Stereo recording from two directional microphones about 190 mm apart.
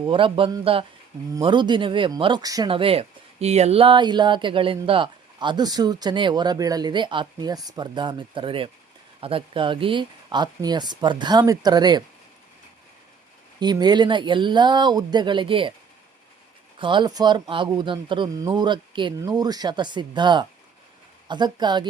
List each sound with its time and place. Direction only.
0.0 s speech: 25° right (ahead or behind)
13.6 s speech: 20° right (ahead or behind)
16.8 s speech: 25° right (ahead or behind)